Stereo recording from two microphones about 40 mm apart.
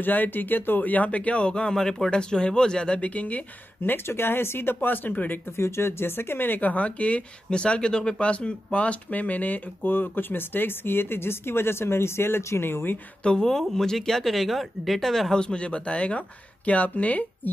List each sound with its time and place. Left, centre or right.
0.0 s speech: left
1.5 s speech: centre
3.2 s speech: left
3.8 s speech: left
4.8 s speech: left
5.6 s speech: left
9.1 s speech: left
13.2 s speech: left
13.5 s speech: centre
15.3 s speech: left